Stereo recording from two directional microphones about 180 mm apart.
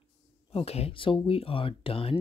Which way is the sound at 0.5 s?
35° left (ahead or behind).